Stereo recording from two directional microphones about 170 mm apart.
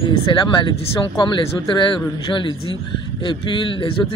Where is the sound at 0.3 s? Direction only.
30° left (ahead or behind).